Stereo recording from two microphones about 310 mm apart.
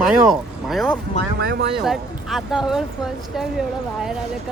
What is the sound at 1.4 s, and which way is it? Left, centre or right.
Speech, right.